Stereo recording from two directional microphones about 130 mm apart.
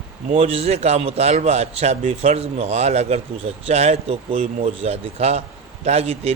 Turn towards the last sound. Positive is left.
turn(degrees=-50)  # may be behind; listen again after turning